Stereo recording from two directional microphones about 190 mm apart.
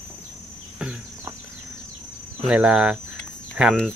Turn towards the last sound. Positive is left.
turn(degrees=0)  # may be behind; listen again after turning